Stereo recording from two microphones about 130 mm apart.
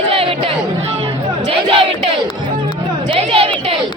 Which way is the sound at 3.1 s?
45° right (ahead or behind).